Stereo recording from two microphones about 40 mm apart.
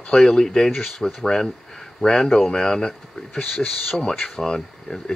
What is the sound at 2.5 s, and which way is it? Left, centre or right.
Speech, centre.